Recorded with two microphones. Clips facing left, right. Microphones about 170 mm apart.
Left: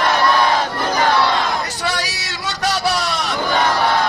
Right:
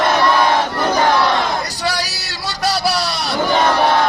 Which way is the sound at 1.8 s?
35° right (ahead or behind).